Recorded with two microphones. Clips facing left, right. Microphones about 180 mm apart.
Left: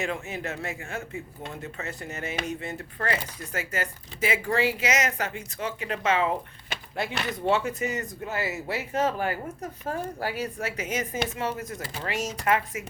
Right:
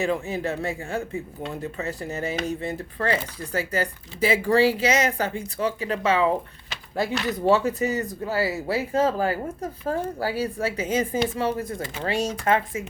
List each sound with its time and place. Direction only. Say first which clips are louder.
0.0 s speech: right 6 dB; 35° right (ahead or behind)